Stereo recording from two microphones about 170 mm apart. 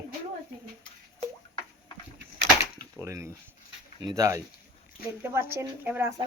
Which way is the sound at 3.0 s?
15° right (ahead or behind).